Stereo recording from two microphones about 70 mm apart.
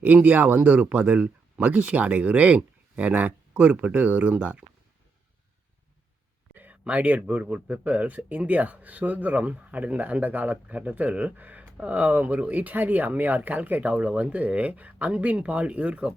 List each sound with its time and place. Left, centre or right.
0.0 s speech: right
6.5 s a sound: right
7.4 s speech: right